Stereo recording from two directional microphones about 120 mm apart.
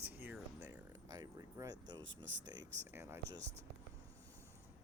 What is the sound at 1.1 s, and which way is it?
Speech, 35° right (ahead or behind).